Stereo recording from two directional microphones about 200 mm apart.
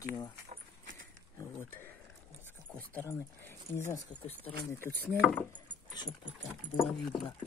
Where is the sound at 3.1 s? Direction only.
10° left (ahead or behind).